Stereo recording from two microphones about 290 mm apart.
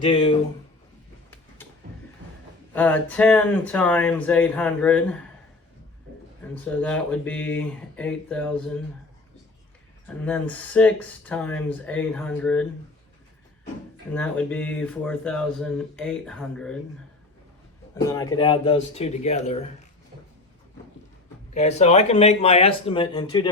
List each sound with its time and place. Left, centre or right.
0.0 s speech: centre
2.7 s speech: centre
6.5 s speech: centre
10.1 s speech: centre
14.1 s speech: centre
18.1 s speech: centre
21.5 s speech: left